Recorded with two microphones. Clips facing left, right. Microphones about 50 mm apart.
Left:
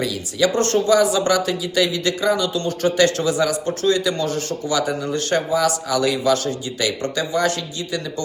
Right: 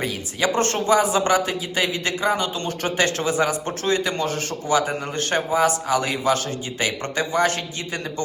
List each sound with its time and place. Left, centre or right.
0.0 s speech: right